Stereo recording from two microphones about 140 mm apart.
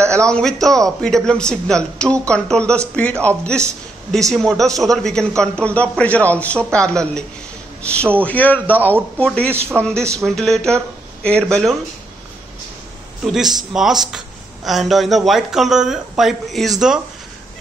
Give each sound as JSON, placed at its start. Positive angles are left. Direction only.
{"t": 0.3, "sound": "speech", "side_deg": 5}
{"t": 9.5, "sound": "a man's voice", "side_deg": -15}
{"t": 9.8, "sound": "speech", "side_deg": 5}
{"t": 13.2, "sound": "speech", "side_deg": -5}